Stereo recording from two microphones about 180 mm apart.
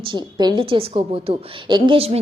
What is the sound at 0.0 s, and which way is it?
A woman's voice, 25° right (ahead or behind).